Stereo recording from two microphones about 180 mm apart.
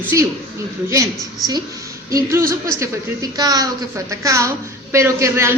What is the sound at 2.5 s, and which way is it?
A woman's voice, 15° right (ahead or behind).